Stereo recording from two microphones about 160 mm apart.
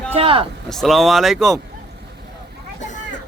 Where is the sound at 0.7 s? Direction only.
Centre (ahead or behind).